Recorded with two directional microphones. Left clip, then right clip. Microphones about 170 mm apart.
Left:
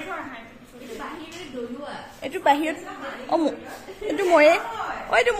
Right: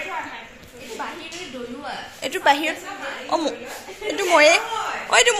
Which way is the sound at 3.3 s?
25° left (ahead or behind).